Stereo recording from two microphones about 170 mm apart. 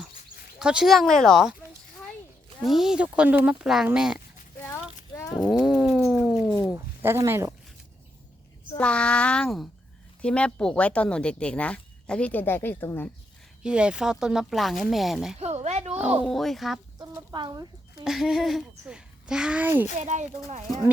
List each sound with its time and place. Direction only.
0.6 s speech: 5° right (ahead or behind)
2.6 s speech: centre (ahead or behind)
4.6 s a sound: 15° left (ahead or behind)
5.5 s cat: centre (ahead or behind)
6.0 s a sound: 10° right (ahead or behind)
8.8 s speech: 5° left (ahead or behind)
13.6 s speech: 5° right (ahead or behind)
15.4 s a sound: 40° right (ahead or behind)
16.2 s speech: centre (ahead or behind)
17.0 s speech: 25° right (ahead or behind)
18.0 s speech: centre (ahead or behind)
20.0 s speech: 45° right (ahead or behind)